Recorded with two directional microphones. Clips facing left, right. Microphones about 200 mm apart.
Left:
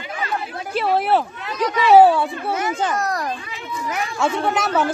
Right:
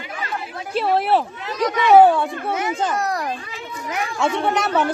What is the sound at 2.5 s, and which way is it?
A child's voice, 15° right (ahead or behind).